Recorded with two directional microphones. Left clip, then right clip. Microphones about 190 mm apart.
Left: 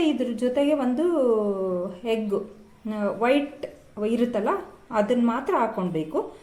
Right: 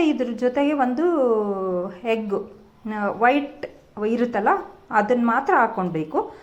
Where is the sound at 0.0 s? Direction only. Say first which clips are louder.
Right 3 dB; 5° right (ahead or behind).